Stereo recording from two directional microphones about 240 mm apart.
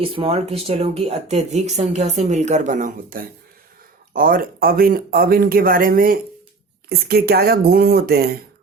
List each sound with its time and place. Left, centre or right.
0.0 s speech: right